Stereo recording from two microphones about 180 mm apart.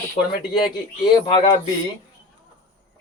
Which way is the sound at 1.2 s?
25° left (ahead or behind).